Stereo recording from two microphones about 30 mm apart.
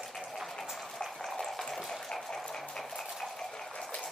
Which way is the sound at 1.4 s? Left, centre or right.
Centre.